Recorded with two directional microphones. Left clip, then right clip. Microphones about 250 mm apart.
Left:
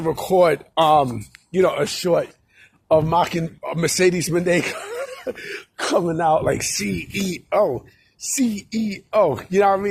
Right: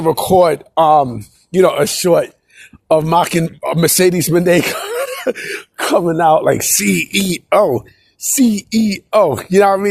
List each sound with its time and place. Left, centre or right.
0.0 s speech: right
1.5 s speech: right
6.7 s speech: right